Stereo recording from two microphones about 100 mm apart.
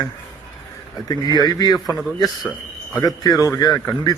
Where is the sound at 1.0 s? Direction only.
40° left (ahead or behind).